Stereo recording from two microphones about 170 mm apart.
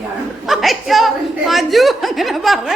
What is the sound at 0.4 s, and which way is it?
Speech, centre (ahead or behind).